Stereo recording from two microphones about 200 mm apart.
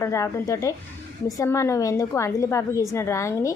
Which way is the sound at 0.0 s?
15° left (ahead or behind).